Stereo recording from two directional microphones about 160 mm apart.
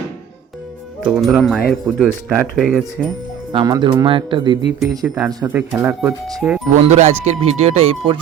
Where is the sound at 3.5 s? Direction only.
25° right (ahead or behind).